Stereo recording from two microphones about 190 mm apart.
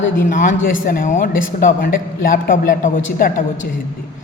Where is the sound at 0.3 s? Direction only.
40° left (ahead or behind).